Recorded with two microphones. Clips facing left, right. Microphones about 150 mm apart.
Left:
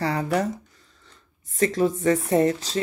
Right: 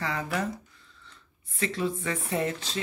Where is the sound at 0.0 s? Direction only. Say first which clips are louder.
Left 7 dB; 40° left (ahead or behind).